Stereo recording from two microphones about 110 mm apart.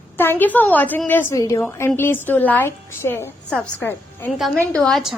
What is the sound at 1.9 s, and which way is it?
A woman's voice, 20° left (ahead or behind).